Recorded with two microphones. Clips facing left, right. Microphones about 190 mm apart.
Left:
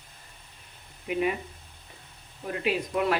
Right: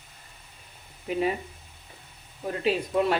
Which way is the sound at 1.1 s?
35° right (ahead or behind).